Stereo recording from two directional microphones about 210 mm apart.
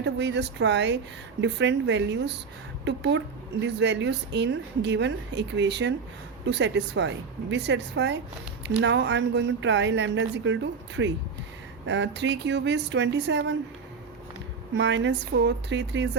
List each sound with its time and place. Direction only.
0.0 s speech: 55° right (ahead or behind)
14.8 s speech: 60° right (ahead or behind)